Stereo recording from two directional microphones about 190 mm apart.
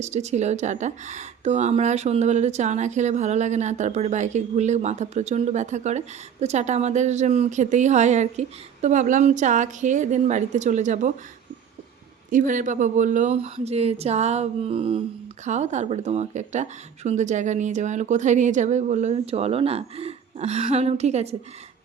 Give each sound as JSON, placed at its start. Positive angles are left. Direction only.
{"t": 0.0, "sound": "speech", "side_deg": -35}
{"t": 12.3, "sound": "speech", "side_deg": -40}